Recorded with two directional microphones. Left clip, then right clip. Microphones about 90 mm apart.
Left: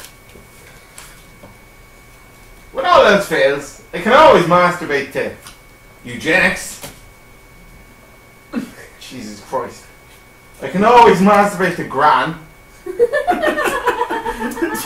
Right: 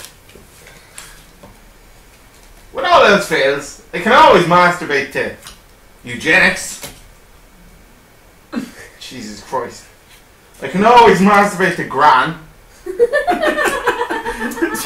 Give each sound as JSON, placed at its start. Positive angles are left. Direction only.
{"t": 2.7, "sound": "a man's voice", "side_deg": -15}
{"t": 9.5, "sound": "speech", "side_deg": -30}
{"t": 10.6, "sound": "a man's voice", "side_deg": -15}
{"t": 12.9, "sound": "chuckle", "side_deg": 15}
{"t": 13.4, "sound": "a sound", "side_deg": -5}
{"t": 14.0, "sound": "chuckle", "side_deg": -10}